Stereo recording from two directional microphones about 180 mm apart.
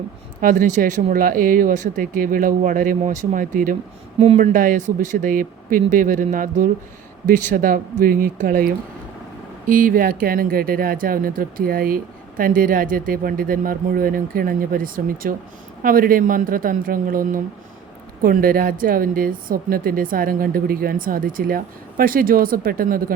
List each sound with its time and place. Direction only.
0.4 s speech: 45° right (ahead or behind)
4.2 s speech: 35° right (ahead or behind); by 23.1 s 55° right (ahead or behind)